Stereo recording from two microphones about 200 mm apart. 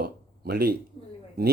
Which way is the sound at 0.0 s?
50° right (ahead or behind).